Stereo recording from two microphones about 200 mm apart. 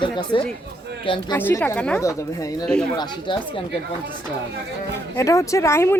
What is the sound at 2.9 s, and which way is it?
Speech, 20° left (ahead or behind).